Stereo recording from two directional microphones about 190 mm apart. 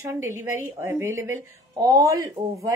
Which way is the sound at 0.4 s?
15° right (ahead or behind).